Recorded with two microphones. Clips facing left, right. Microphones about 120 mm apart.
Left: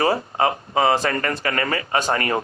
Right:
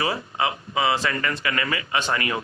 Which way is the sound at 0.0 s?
40° left (ahead or behind).